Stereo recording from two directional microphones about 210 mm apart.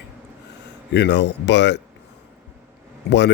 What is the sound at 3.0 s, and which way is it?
Speech, 50° left (ahead or behind).